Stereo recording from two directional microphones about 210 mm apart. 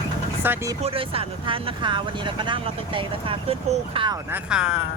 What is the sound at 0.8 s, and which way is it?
Speech, 30° right (ahead or behind).